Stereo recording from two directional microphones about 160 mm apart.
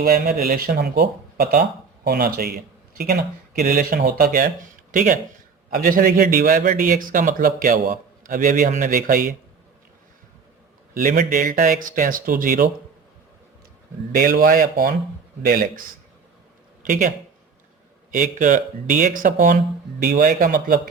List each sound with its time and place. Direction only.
0.0 s a man's voice: 70° right (ahead or behind)
10.9 s a man's voice: 60° right (ahead or behind)
14.1 s a man's voice: 60° right (ahead or behind)
16.8 s speech: 55° right (ahead or behind)
18.1 s a man's voice: 55° right (ahead or behind)